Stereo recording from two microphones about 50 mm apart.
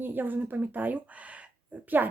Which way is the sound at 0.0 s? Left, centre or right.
Right.